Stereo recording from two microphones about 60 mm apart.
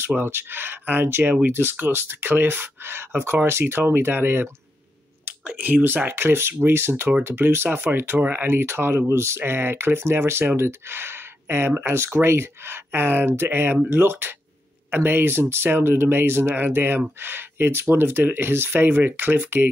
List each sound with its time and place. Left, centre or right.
0.0 s speech: right